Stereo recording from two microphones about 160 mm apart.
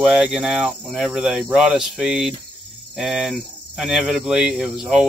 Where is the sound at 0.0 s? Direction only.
5° right (ahead or behind).